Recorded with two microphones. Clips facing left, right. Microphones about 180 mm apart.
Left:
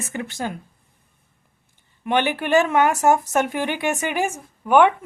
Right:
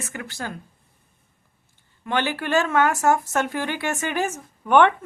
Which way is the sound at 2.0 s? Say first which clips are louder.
Left 3 dB; 20° left (ahead or behind).